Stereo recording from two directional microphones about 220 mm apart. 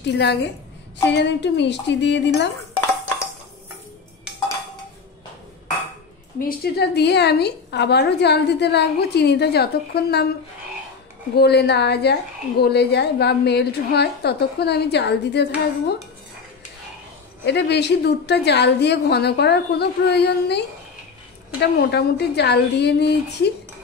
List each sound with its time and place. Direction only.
0.0 s a woman's voice: 50° left (ahead or behind)
6.4 s a woman's voice: 45° left (ahead or behind)
11.3 s a woman's voice: 50° left (ahead or behind)
17.5 s a woman's voice: 50° left (ahead or behind)